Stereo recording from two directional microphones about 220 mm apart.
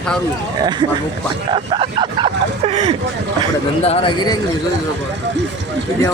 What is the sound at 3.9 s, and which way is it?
Speech, 20° left (ahead or behind).